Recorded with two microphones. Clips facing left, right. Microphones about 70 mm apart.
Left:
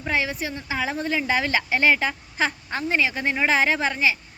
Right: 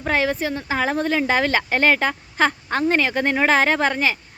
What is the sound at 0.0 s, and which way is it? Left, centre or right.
Speech, right.